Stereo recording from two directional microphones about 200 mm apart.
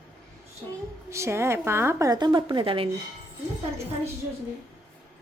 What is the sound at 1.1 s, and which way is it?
A woman's voice, 15° right (ahead or behind).